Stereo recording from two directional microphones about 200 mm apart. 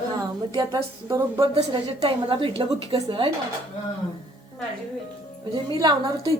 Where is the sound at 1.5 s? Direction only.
30° right (ahead or behind).